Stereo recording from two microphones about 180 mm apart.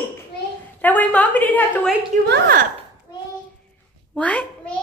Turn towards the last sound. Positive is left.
turn(degrees=5)  # may be behind; listen again after turning